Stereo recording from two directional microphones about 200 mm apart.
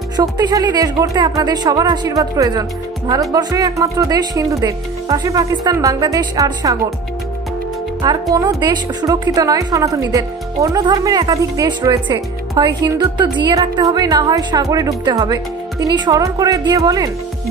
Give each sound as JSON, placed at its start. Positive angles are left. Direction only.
{"t": 0.2, "sound": "a woman's voice", "side_deg": -20}
{"t": 8.0, "sound": "a woman's voice", "side_deg": -20}